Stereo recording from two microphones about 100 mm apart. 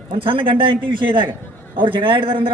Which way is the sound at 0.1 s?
65° right (ahead or behind).